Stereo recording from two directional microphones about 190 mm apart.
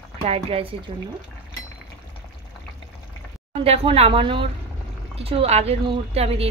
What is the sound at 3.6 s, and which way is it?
A woman's voice, 30° right (ahead or behind).